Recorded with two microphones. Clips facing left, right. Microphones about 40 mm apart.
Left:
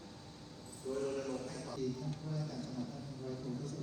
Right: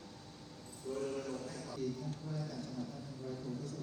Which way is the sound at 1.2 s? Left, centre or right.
Left.